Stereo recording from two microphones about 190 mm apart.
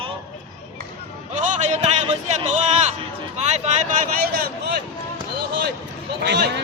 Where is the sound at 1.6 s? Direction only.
35° right (ahead or behind).